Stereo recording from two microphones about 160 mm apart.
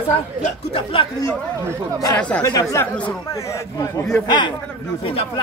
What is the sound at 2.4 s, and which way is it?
A man's voice, 20° left (ahead or behind).